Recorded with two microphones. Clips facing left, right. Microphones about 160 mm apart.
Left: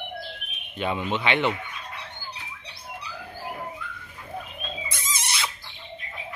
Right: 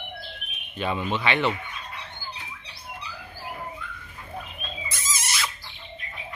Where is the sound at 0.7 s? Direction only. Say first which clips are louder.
Even; 15° left (ahead or behind).